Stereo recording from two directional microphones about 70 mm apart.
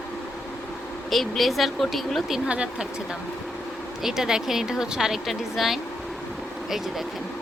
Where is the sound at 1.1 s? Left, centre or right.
Centre.